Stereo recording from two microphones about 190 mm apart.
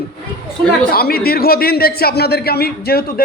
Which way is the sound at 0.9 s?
55° left (ahead or behind).